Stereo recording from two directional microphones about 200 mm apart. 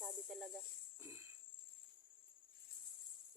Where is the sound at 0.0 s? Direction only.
Centre (ahead or behind).